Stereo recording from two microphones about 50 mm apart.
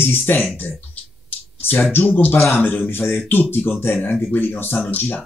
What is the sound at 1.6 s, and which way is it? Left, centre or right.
Speech, left.